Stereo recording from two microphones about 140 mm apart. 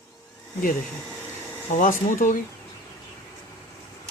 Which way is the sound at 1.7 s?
70° left (ahead or behind).